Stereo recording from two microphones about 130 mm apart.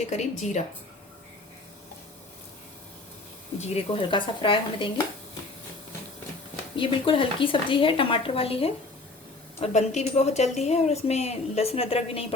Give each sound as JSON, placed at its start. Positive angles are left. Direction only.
{"t": 0.0, "sound": "speech", "side_deg": 60}
{"t": 3.6, "sound": "a woman's voice", "side_deg": 40}
{"t": 6.7, "sound": "a woman's voice", "side_deg": 45}
{"t": 9.6, "sound": "speech", "side_deg": 60}